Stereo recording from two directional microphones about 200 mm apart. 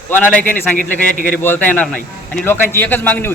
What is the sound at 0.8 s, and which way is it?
Speech, 45° left (ahead or behind).